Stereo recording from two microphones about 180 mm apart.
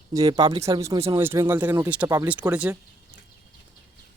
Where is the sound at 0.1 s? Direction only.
20° right (ahead or behind).